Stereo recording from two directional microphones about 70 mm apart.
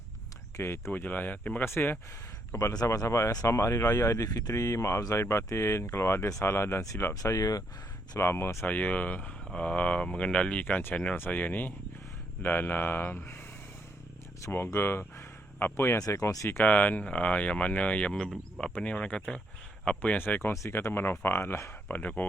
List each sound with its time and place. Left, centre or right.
0.6 s speech: left
1.6 s speech: left
2.5 s speech: left
7.1 s speech: left
8.2 s speech: left
8.6 s speech: left
14.4 s speech: left
16.0 s speech: left
16.6 s speech: left
20.5 s speech: left
21.8 s speech: left